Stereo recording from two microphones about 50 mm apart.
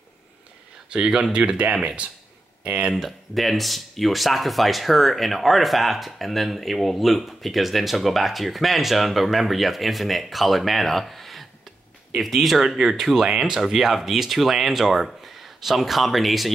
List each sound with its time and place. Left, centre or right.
0.9 s speech: centre
2.9 s speech: centre